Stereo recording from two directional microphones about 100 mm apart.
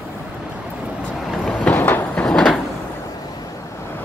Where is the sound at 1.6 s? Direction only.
15° left (ahead or behind).